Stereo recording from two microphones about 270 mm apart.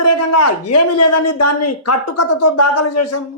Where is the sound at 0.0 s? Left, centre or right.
Left.